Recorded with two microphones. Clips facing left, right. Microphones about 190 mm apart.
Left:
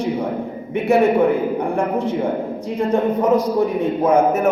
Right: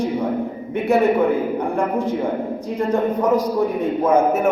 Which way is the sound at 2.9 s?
15° left (ahead or behind).